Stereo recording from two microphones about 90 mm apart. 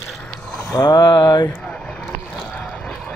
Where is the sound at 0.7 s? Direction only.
50° left (ahead or behind).